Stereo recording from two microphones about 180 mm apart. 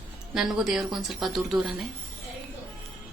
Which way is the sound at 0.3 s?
Centre (ahead or behind).